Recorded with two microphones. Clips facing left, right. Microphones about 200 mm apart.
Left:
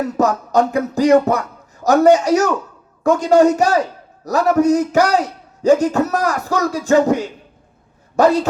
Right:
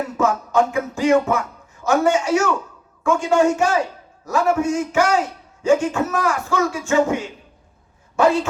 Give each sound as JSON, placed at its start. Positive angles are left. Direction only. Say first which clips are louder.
{"t": 0.2, "sound": "a man's voice", "louder": "left 2 dB", "side_deg": 40}